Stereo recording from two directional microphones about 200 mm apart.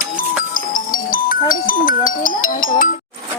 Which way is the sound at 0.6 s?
45° left (ahead or behind).